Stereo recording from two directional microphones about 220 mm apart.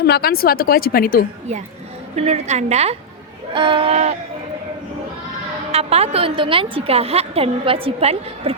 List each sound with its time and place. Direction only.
0.0 s a woman's voice: 45° left (ahead or behind)
2.1 s a woman's voice: 30° right (ahead or behind)
5.7 s a woman's voice: 30° right (ahead or behind)